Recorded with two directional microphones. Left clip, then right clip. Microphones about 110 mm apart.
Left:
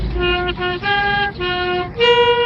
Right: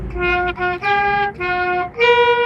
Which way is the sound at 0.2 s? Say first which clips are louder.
Right 1 dB; 20° right (ahead or behind).